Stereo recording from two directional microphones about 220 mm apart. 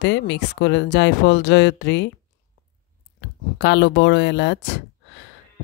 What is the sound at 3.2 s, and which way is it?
Speech, 55° left (ahead or behind).